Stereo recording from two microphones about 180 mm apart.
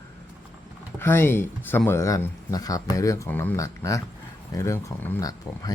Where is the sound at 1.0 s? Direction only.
10° left (ahead or behind).